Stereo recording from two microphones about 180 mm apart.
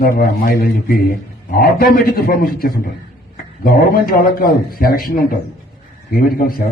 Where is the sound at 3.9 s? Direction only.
55° left (ahead or behind).